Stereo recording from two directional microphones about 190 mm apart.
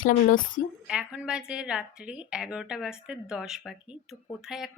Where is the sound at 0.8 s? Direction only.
5° right (ahead or behind).